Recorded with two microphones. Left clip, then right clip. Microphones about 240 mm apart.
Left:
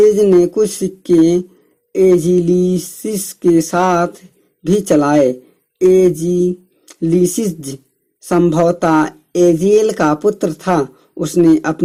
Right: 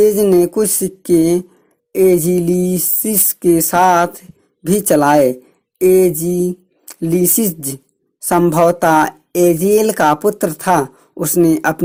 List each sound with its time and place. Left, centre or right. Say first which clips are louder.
0.0 s speech: left 2 dB; right